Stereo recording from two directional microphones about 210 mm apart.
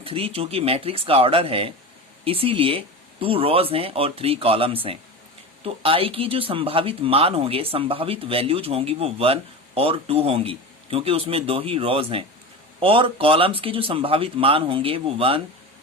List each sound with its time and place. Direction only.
0.0 s speech: 25° right (ahead or behind)